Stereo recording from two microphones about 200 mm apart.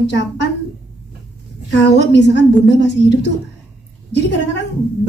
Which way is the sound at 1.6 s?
60° left (ahead or behind).